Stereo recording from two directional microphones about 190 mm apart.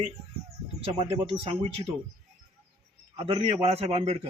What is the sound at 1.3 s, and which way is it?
Speech, 30° right (ahead or behind).